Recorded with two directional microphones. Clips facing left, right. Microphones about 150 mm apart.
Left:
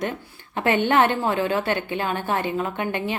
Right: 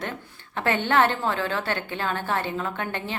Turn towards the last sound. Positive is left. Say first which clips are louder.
# left 4 dB
turn(degrees=15)  # may be behind; listen again after turning